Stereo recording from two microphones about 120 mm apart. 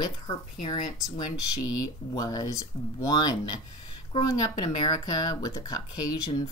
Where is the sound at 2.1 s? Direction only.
30° left (ahead or behind).